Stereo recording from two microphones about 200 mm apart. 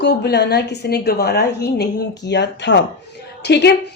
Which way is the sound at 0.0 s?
55° left (ahead or behind).